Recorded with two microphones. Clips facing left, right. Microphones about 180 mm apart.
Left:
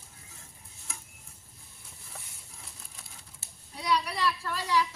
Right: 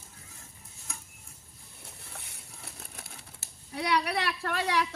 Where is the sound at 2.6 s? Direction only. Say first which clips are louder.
Right 7 dB; 65° right (ahead or behind).